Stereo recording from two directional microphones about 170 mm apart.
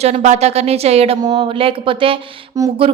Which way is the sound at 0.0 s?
40° right (ahead or behind).